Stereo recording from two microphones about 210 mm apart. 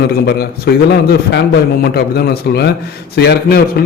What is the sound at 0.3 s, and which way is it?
Speech, 50° left (ahead or behind).